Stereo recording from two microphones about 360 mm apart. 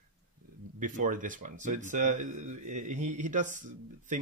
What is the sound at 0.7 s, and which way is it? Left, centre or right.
Speech, right.